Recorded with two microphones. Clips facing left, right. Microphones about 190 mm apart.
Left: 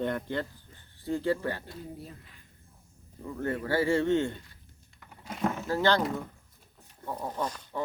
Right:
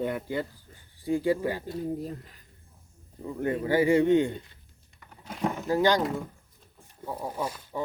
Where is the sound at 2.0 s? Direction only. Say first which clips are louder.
Right 10 dB; 40° right (ahead or behind).